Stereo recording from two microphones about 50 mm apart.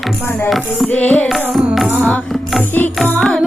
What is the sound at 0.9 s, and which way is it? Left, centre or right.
Music, left.